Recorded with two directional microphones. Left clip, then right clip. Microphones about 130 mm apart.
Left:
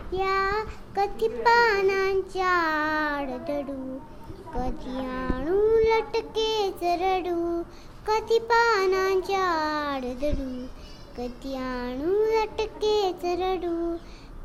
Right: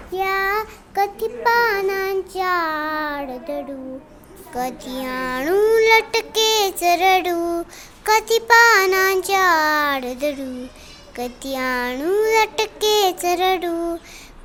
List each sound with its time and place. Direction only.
0.1 s child singing: 25° right (ahead or behind)
8.0 s a child's voice: 30° right (ahead or behind)